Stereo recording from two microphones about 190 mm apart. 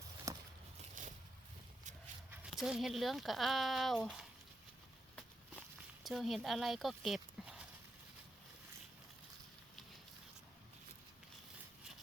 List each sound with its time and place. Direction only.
0.3 s a sound: 20° right (ahead or behind)
2.3 s speech: 5° right (ahead or behind)
6.0 s speech: centre (ahead or behind)